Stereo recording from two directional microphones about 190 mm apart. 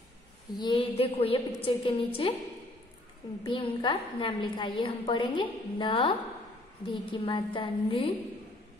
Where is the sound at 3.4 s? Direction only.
25° left (ahead or behind).